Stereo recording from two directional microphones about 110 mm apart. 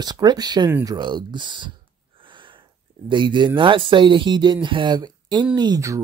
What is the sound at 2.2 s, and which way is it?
Sniff, 50° right (ahead or behind).